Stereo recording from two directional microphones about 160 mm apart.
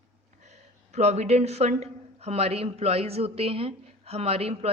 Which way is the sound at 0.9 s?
45° right (ahead or behind).